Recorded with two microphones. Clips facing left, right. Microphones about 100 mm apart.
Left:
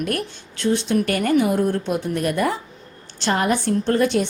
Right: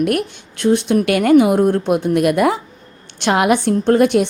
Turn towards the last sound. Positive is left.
turn(degrees=-60)  # may be behind; listen again after turning